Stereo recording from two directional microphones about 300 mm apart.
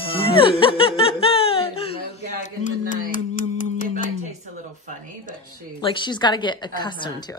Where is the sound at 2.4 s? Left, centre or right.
Left.